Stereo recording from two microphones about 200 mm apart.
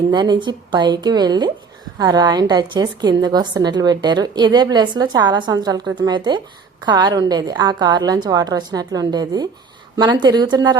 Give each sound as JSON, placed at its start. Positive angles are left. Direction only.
{"t": 0.1, "sound": "a woman's voice", "side_deg": -20}